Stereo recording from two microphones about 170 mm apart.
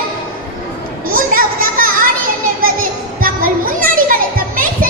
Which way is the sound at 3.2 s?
55° right (ahead or behind).